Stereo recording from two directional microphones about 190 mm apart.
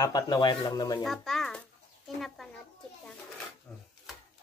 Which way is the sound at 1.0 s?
Centre (ahead or behind).